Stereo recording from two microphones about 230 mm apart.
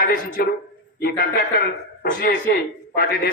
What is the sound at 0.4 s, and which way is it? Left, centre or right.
A man's voice, left.